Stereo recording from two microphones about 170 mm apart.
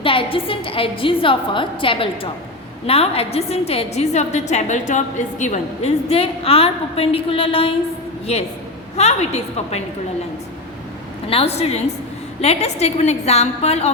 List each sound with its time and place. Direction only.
0.0 s a woman's voice: 30° left (ahead or behind)
11.3 s a woman's voice: 35° left (ahead or behind)